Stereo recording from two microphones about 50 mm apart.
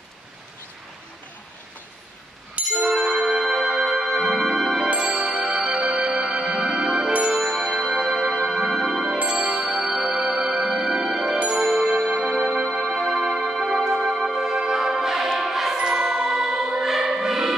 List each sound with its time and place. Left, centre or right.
2.7 s music: centre
4.8 s music: centre
7.3 s music: centre
9.3 s music: centre
12.3 s music: centre
14.0 s music: centre